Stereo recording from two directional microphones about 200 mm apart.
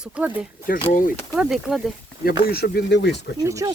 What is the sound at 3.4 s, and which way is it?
Speech, 15° right (ahead or behind).